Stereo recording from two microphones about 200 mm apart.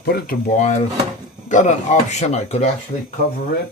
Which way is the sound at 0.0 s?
50° left (ahead or behind).